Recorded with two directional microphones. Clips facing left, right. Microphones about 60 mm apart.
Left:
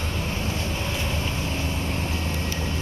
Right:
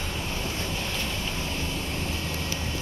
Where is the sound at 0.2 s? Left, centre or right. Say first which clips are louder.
Left 4 dB; left.